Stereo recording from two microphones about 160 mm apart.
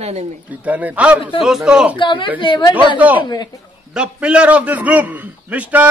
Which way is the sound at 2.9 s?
10° right (ahead or behind).